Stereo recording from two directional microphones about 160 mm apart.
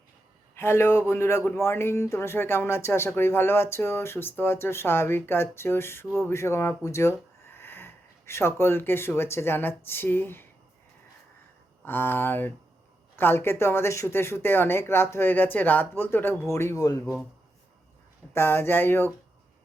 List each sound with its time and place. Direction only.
0.5 s speech: 15° left (ahead or behind)
11.9 s speech: 15° left (ahead or behind)
18.3 s speech: 15° left (ahead or behind)